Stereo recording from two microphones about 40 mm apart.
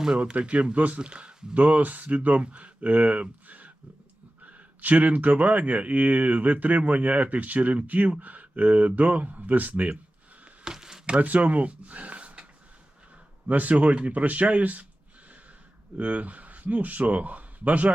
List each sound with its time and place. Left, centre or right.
0.2 s speech: right
1.5 s speech: right
10.6 s a sound: centre
11.2 s speech: right
13.5 s speech: right
16.0 s speech: right